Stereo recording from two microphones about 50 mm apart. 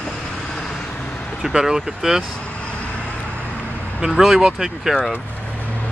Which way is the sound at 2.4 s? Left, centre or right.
Left.